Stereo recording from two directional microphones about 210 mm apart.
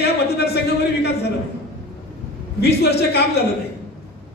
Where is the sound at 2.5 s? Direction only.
50° left (ahead or behind).